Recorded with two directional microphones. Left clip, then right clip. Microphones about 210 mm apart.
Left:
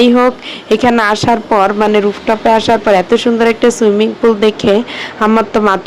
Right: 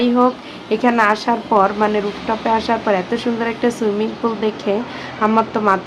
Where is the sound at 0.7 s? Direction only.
40° left (ahead or behind).